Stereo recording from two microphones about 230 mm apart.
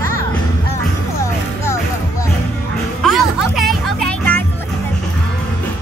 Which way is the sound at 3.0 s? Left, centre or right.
Centre.